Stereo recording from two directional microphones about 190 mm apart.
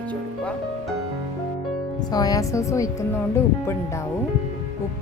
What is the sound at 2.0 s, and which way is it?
A woman's voice, 20° left (ahead or behind).